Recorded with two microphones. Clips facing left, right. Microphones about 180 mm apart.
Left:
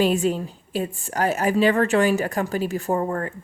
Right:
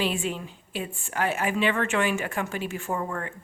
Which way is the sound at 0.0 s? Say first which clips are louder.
Left 8 dB; 40° left (ahead or behind).